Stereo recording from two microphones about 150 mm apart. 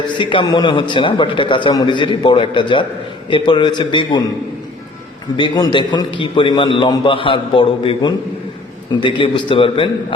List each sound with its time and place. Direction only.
0.2 s a man's voice: 35° left (ahead or behind)
5.4 s a man's voice: 30° left (ahead or behind)